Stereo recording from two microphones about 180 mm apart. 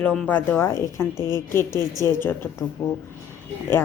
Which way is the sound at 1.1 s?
20° right (ahead or behind).